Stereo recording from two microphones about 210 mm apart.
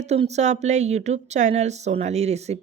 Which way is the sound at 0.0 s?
30° right (ahead or behind).